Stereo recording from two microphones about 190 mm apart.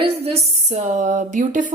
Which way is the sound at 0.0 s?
30° right (ahead or behind).